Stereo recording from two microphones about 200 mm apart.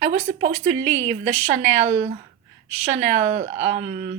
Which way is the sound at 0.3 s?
35° right (ahead or behind).